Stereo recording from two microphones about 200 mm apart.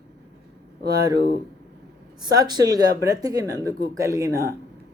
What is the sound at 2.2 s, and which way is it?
Speech, 20° right (ahead or behind).